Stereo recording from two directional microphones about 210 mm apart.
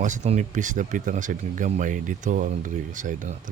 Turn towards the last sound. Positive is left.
turn(degrees=-40)  # may be behind; listen again after turning